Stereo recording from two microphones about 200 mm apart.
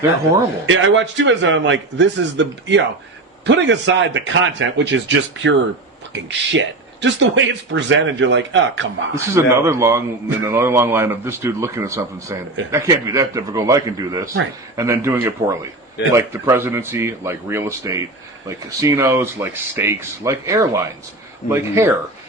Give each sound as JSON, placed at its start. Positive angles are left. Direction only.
{"t": 0.7, "sound": "a man's voice", "side_deg": -70}
{"t": 9.1, "sound": "a man's voice", "side_deg": -15}